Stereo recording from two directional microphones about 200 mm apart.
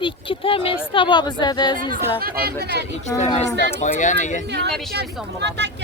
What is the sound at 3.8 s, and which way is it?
Speech, 40° left (ahead or behind).